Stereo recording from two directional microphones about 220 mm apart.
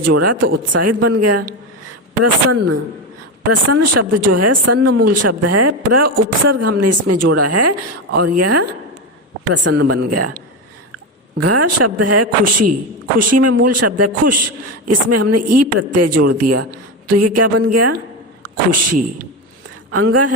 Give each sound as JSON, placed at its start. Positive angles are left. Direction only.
{"t": 0.1, "sound": "speech", "side_deg": -90}
{"t": 19.9, "sound": "speech", "side_deg": -90}